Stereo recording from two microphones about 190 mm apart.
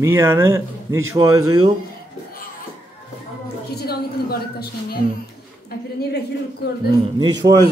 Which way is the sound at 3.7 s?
55° left (ahead or behind).